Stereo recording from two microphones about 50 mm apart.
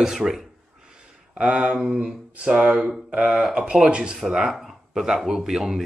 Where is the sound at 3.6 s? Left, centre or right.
Right.